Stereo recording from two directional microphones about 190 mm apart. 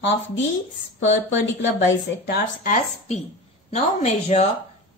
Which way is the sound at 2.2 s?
45° left (ahead or behind).